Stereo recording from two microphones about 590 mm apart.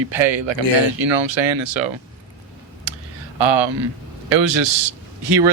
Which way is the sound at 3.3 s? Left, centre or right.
Right.